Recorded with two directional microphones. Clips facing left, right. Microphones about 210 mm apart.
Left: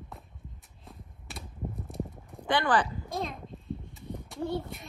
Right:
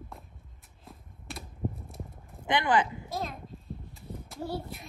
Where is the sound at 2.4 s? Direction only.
20° right (ahead or behind).